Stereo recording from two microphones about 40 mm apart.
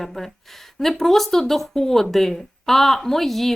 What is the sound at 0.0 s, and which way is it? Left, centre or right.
Speech, centre.